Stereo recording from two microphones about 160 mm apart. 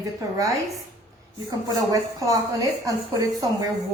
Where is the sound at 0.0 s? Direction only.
20° right (ahead or behind).